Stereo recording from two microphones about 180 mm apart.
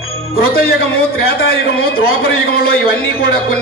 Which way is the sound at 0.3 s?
55° left (ahead or behind).